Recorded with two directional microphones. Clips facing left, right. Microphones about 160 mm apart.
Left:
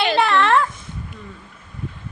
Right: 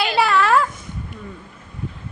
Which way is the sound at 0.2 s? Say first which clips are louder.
Right 2 dB; 5° right (ahead or behind).